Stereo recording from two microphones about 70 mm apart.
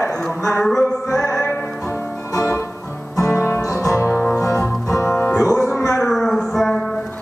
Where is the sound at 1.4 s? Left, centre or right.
Left.